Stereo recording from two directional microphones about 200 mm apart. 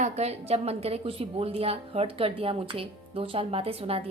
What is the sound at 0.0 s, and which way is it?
A woman's voice, 30° right (ahead or behind).